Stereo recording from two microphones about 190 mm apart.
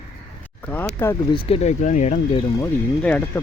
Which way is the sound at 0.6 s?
10° left (ahead or behind).